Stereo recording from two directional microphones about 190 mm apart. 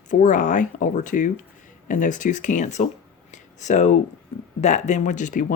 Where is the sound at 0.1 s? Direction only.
45° left (ahead or behind).